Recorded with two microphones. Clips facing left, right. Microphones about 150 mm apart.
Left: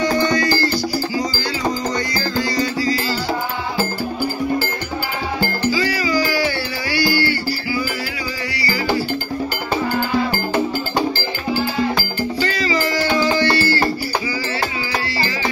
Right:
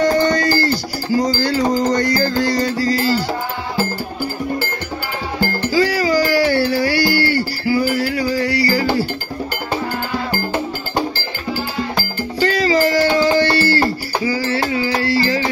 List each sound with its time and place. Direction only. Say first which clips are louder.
0.0 s music: right 3 dB; 55° right (ahead or behind)
5.7 s music: right 5 dB; 60° right (ahead or behind)
12.4 s music: right 7 dB; 50° right (ahead or behind)